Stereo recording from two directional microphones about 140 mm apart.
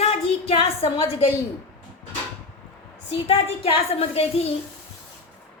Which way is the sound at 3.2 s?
45° left (ahead or behind).